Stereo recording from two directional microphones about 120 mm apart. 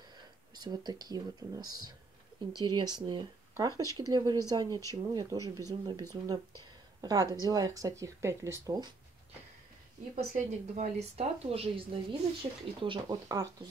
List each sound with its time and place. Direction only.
0.6 s speech: 35° right (ahead or behind)
10.1 s speech: 80° right; by 13.5 s 35° right (ahead or behind)